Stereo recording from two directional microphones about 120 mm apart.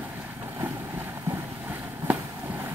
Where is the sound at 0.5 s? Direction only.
20° right (ahead or behind).